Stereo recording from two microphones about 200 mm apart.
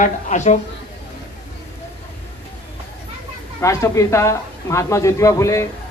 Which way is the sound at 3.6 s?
15° left (ahead or behind).